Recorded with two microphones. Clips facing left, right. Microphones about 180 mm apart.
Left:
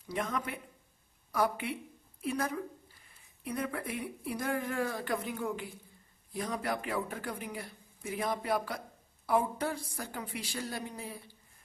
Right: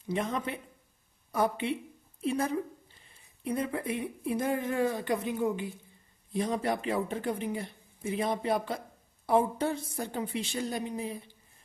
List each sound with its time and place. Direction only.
0.0 s a woman's voice: 25° right (ahead or behind)